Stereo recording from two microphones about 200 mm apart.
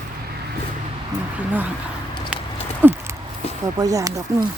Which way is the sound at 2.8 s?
10° right (ahead or behind).